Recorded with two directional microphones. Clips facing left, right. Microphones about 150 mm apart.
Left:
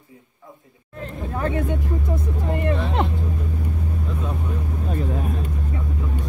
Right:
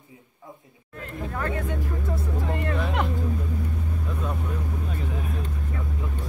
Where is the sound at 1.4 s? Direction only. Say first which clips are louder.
Left 6 dB; 20° left (ahead or behind).